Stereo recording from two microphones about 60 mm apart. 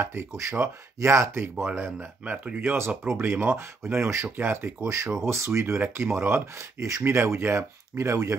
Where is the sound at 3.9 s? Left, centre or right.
Right.